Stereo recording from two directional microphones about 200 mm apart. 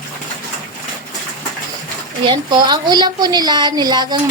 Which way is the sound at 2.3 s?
20° right (ahead or behind).